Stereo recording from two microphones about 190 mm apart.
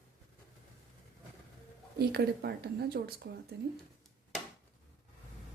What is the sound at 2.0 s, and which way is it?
A woman's voice, 55° right (ahead or behind).